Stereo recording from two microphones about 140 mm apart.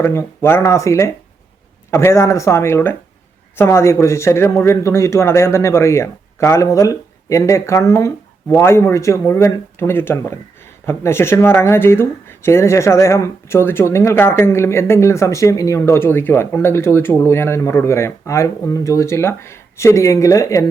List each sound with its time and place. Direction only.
0.0 s speech: 20° left (ahead or behind)